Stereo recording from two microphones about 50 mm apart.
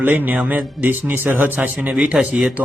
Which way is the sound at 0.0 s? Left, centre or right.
Right.